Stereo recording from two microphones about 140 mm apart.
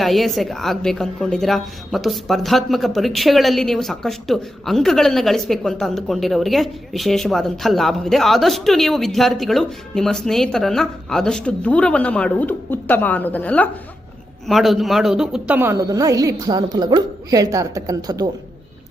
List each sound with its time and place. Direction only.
0.0 s a woman's voice: centre (ahead or behind)
14.4 s speech: centre (ahead or behind); by 18.3 s 25° right (ahead or behind)